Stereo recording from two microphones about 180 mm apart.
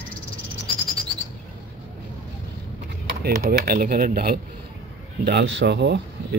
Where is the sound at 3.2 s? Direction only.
55° right (ahead or behind).